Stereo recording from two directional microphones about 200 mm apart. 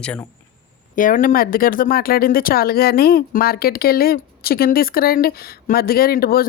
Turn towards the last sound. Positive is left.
turn(degrees=45)  # may be behind; listen again after turning